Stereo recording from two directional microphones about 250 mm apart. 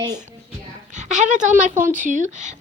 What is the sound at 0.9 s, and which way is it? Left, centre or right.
Speech, right.